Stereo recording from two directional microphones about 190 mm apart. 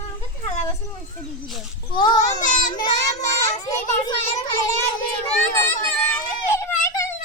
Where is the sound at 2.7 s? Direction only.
20° left (ahead or behind).